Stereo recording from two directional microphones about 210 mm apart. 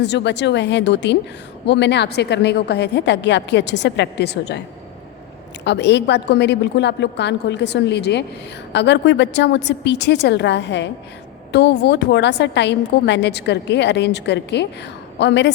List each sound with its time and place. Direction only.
0.0 s a woman's voice: 55° left (ahead or behind)
5.6 s a woman's voice: 55° left (ahead or behind)